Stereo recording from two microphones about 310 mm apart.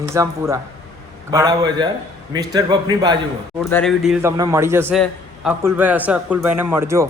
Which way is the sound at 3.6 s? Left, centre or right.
Centre.